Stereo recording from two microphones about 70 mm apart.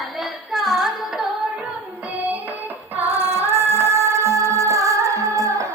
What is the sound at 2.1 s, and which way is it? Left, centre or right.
Music, right.